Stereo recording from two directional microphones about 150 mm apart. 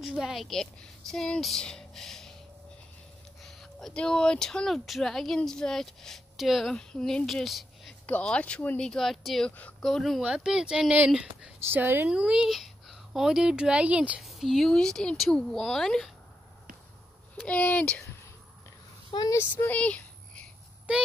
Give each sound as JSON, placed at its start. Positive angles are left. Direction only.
{"t": 0.0, "sound": "speech", "side_deg": 0}
{"t": 3.4, "sound": "a child's voice", "side_deg": 5}
{"t": 17.4, "sound": "speech", "side_deg": 10}
{"t": 19.1, "sound": "speech", "side_deg": 25}
{"t": 19.5, "sound": "a sound", "side_deg": 10}